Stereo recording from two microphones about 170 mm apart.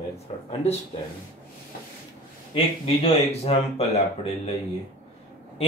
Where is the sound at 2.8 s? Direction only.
35° left (ahead or behind).